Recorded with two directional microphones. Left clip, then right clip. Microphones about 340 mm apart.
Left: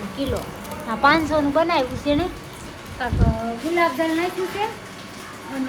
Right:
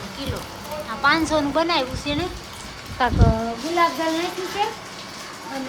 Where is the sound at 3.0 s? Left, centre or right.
Centre.